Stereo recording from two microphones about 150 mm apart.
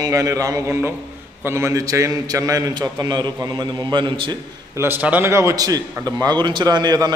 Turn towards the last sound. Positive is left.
turn(degrees=-25)  # may be behind; listen again after turning